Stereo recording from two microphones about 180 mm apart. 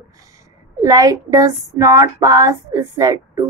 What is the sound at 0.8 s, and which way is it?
A woman's voice, 20° right (ahead or behind).